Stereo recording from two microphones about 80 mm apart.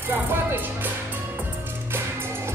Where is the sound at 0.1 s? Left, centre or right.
Right.